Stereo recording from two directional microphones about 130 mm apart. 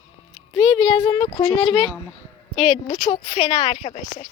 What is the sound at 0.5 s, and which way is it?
Speech, 35° left (ahead or behind).